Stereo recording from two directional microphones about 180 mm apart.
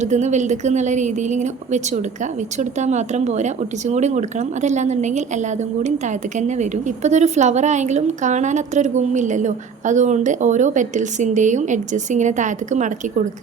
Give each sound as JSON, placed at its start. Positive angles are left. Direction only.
{"t": 0.0, "sound": "speech", "side_deg": -40}